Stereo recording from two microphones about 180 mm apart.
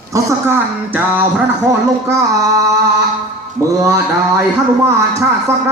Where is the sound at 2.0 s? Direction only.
20° right (ahead or behind).